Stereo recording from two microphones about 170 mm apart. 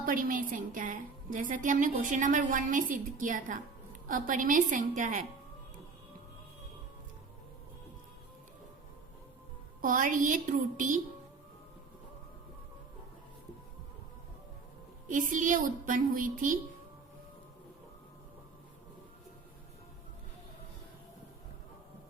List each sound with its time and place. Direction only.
0.0 s a woman's voice: 55° right (ahead or behind)
9.8 s a woman's voice: 50° right (ahead or behind)
15.0 s a woman's voice: 50° right (ahead or behind)